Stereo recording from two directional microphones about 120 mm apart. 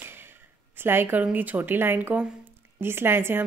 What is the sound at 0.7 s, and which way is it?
A woman's voice, 20° right (ahead or behind).